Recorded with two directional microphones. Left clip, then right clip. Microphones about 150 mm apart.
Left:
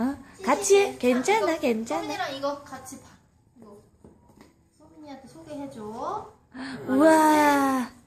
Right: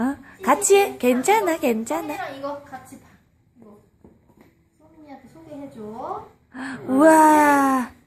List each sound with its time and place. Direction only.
0.0 s a woman's voice: 15° right (ahead or behind)
6.5 s a woman's voice: 15° right (ahead or behind)